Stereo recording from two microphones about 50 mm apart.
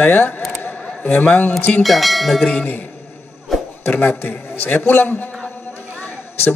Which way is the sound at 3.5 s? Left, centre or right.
Centre.